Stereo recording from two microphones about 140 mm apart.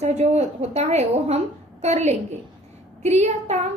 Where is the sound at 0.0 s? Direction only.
50° right (ahead or behind).